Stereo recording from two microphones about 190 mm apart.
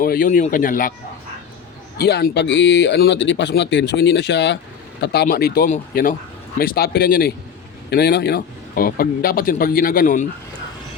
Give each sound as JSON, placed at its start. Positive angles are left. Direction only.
{"t": 0.0, "sound": "a man's voice", "side_deg": 50}
{"t": 2.0, "sound": "a man's voice", "side_deg": 60}